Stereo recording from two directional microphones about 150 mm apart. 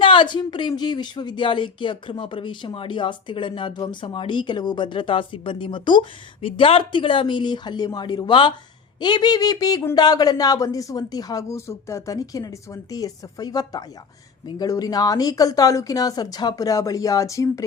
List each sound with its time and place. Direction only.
0.0 s speech: 35° left (ahead or behind)